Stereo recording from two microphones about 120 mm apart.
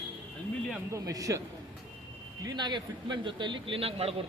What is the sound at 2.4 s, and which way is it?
A man's voice, 35° right (ahead or behind).